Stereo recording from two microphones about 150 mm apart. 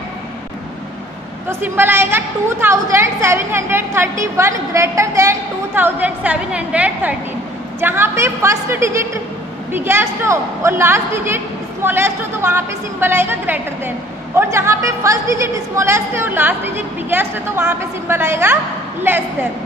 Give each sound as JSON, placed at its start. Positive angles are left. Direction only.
{"t": 1.5, "sound": "a woman's voice", "side_deg": -15}